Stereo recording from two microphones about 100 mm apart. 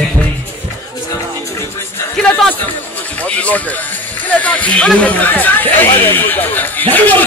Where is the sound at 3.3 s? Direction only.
15° left (ahead or behind).